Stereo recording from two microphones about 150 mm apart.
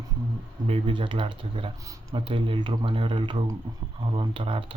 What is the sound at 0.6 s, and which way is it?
Speech, 40° right (ahead or behind).